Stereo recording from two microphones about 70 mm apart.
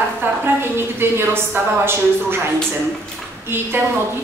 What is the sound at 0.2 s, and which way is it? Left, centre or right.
A woman's voice, right.